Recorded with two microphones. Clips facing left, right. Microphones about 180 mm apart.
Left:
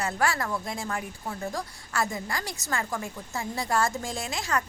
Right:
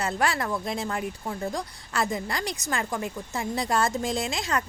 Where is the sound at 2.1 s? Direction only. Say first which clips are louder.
Right 4 dB; 20° right (ahead or behind).